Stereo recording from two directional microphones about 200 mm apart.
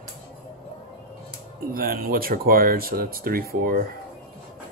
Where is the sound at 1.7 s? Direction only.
45° right (ahead or behind).